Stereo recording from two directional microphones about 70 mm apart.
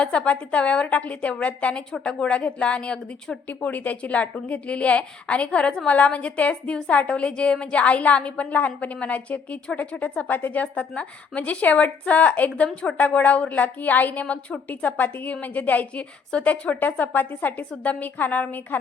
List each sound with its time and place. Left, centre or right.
0.0 s a woman's voice: centre